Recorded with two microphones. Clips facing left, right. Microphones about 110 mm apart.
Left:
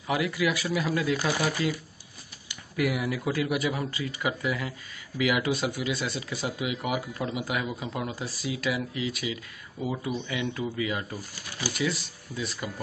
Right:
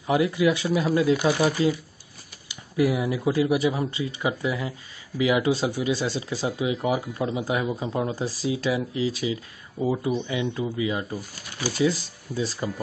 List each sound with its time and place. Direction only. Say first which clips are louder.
0.0 s speech: right 6 dB; 25° right (ahead or behind)